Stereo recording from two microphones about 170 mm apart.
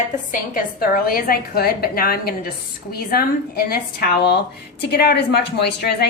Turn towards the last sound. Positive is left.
turn(degrees=75)  # may be behind; listen again after turning